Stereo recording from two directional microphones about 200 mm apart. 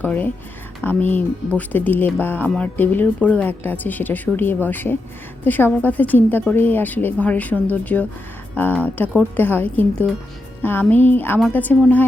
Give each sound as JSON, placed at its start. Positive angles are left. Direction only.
{"t": 0.0, "sound": "speech", "side_deg": 10}